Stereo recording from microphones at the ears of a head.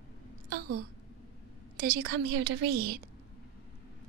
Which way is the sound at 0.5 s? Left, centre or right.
Right.